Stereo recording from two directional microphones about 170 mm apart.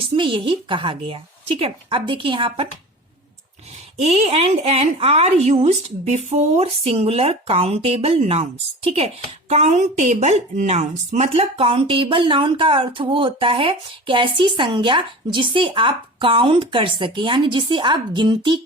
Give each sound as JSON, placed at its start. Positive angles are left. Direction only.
{"t": 0.1, "sound": "a woman's voice", "side_deg": -30}
{"t": 3.9, "sound": "a woman's voice", "side_deg": -40}